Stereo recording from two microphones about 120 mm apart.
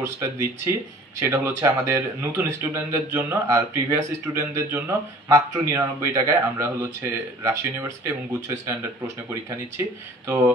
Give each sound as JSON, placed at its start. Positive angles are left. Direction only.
{"t": 0.0, "sound": "speech", "side_deg": -25}